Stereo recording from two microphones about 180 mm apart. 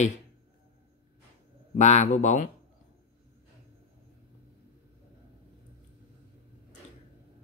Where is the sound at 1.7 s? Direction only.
40° left (ahead or behind).